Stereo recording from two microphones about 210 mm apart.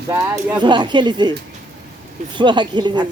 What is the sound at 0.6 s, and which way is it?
Speech, 20° right (ahead or behind).